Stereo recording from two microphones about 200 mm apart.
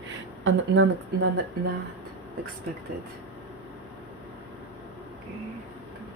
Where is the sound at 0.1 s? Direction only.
70° right (ahead or behind).